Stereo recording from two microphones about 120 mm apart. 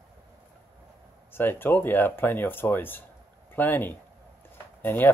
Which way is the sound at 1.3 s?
15° left (ahead or behind).